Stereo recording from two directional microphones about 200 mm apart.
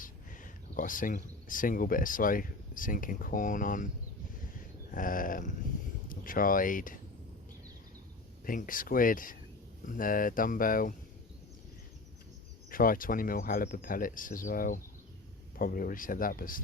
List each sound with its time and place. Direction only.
0.0 s speech: 40° left (ahead or behind)
4.9 s speech: 45° left (ahead or behind)
8.4 s speech: 45° left (ahead or behind)
12.7 s speech: 45° left (ahead or behind)